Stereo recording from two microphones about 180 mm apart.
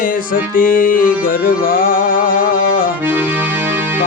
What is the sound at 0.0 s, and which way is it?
Music, 50° left (ahead or behind).